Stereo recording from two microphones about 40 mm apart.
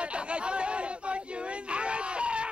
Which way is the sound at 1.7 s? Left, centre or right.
Right.